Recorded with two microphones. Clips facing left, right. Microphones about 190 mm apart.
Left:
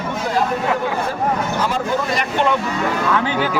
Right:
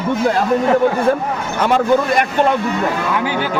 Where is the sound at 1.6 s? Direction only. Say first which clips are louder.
Right 6 dB; 65° right (ahead or behind).